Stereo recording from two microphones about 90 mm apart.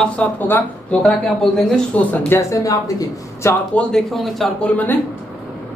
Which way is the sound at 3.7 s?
5° left (ahead or behind).